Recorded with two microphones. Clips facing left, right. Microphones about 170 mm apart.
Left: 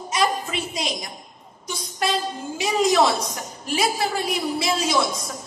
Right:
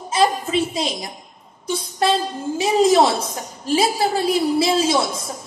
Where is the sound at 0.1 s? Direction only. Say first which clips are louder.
Right 5 dB; 30° right (ahead or behind).